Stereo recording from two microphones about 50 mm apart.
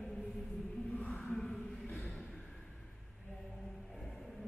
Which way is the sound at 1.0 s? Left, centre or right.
Left.